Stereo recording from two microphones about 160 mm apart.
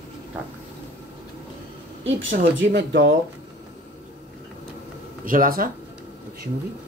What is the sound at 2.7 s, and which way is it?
Speech, 90° right.